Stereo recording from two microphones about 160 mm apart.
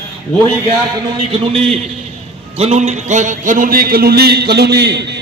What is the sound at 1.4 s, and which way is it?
A man's voice, 35° right (ahead or behind).